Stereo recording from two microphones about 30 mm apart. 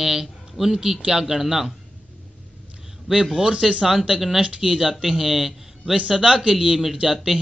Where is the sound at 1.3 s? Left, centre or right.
Centre.